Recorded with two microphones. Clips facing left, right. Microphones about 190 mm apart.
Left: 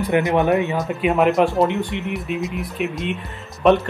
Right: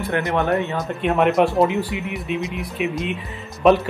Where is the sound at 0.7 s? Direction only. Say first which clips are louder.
Left 1 dB; centre (ahead or behind).